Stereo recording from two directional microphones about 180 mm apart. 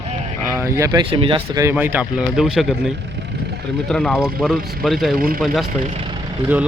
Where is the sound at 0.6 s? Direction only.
15° right (ahead or behind).